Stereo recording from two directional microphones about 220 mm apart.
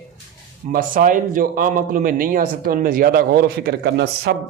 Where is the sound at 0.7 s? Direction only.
40° right (ahead or behind).